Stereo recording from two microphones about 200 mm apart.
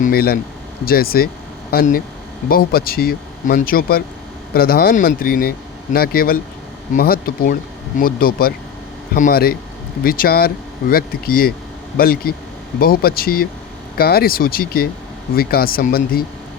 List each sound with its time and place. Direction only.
0.0 s speech: 50° left (ahead or behind)